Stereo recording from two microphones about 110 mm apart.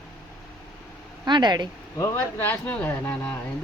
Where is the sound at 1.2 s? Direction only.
40° right (ahead or behind).